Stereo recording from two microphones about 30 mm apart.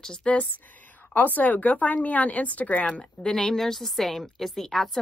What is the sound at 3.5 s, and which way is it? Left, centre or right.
A woman's voice, centre.